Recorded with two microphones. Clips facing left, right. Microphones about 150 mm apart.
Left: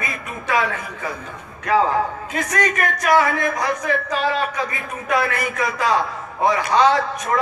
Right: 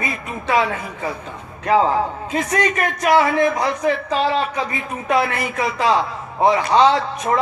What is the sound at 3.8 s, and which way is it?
Speech, 30° right (ahead or behind).